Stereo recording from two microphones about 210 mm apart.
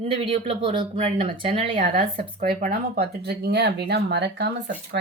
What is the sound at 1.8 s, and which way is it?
Speech, 40° right (ahead or behind).